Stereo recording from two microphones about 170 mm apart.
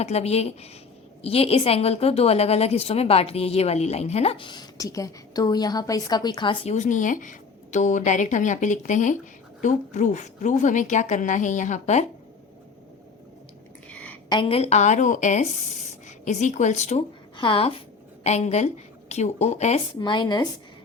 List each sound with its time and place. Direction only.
0.0 s a woman's voice: 40° left (ahead or behind)
6.7 s a woman's voice: 50° left (ahead or behind)
13.9 s a sound: 10° left (ahead or behind)
14.3 s a woman's voice: 30° left (ahead or behind)
17.3 s a woman's voice: 30° left (ahead or behind)
20.0 s speech: 25° left (ahead or behind)